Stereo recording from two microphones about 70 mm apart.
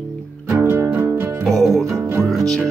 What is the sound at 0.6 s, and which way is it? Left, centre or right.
Music, right.